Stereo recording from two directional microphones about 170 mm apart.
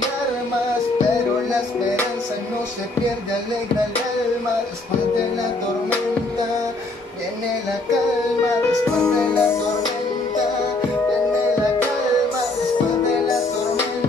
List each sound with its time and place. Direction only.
9.0 s music: 5° left (ahead or behind)